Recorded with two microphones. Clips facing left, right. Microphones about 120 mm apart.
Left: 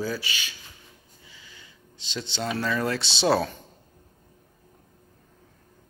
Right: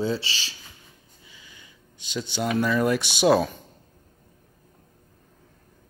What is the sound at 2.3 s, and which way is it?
Speech, 15° right (ahead or behind).